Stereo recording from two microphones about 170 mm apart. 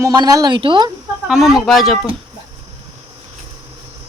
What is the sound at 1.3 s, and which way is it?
Speech, centre (ahead or behind).